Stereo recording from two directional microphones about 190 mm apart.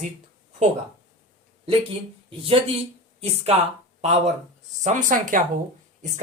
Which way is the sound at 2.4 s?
30° right (ahead or behind).